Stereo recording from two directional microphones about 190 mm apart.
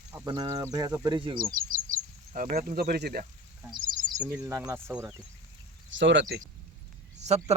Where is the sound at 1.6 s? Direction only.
45° right (ahead or behind).